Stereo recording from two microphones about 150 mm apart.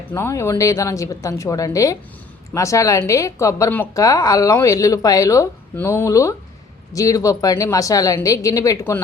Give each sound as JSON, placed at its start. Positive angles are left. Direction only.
{"t": 0.1, "sound": "a woman's voice", "side_deg": 15}